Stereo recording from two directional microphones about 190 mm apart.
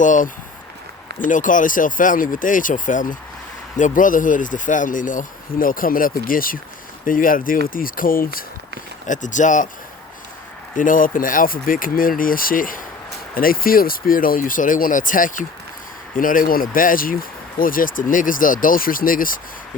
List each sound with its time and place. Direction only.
0.0 s speech: 40° left (ahead or behind)
10.8 s speech: 45° left (ahead or behind)